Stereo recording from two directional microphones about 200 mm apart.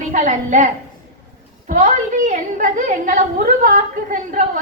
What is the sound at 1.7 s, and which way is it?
A woman's voice, 40° right (ahead or behind).